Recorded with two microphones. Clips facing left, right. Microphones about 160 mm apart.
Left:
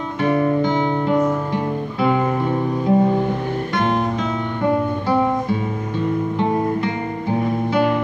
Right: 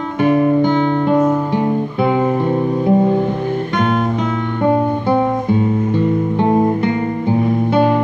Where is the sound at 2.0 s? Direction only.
25° right (ahead or behind).